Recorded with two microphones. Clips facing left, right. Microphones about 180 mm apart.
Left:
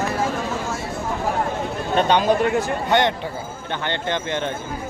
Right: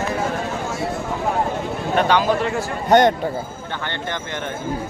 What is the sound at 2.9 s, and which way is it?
Speech, 40° right (ahead or behind).